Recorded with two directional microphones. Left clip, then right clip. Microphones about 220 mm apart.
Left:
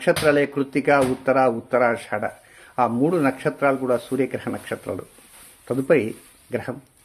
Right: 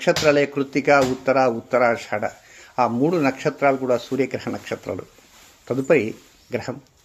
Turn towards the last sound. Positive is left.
turn(degrees=0)  # may be behind; listen again after turning